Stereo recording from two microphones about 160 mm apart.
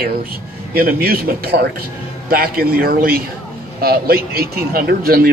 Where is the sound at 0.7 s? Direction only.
70° right (ahead or behind).